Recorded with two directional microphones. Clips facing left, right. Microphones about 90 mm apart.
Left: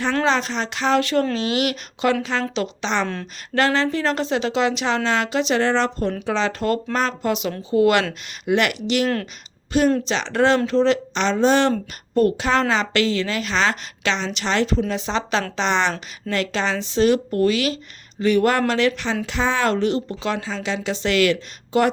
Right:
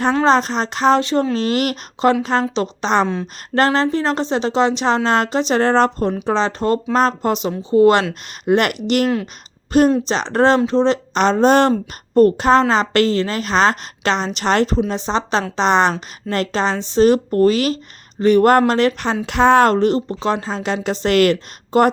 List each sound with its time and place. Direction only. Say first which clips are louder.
0.3 s a woman's voice: right 6 dB; 40° right (ahead or behind)
1.0 s speech: right 2 dB; 25° right (ahead or behind)
1.4 s a woman's voice: right 3 dB; 40° right (ahead or behind)
8.4 s a woman's voice: right 4 dB; 45° right (ahead or behind)
14.8 s a woman's voice: right 3 dB; 35° right (ahead or behind)
19.2 s a woman's voice: right 10 dB; 60° right (ahead or behind)